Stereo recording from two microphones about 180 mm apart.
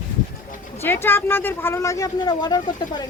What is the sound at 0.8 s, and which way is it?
Speech, 10° left (ahead or behind).